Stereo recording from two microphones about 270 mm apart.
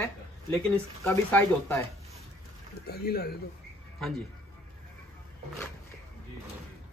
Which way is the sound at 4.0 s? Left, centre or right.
Centre.